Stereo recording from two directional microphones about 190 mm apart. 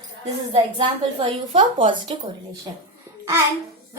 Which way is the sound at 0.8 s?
25° right (ahead or behind).